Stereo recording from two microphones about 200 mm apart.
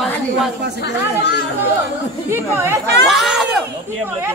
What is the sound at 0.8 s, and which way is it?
Speech, 55° left (ahead or behind).